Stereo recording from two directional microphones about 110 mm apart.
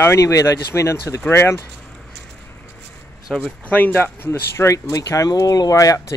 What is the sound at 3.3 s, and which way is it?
Speech, 5° left (ahead or behind).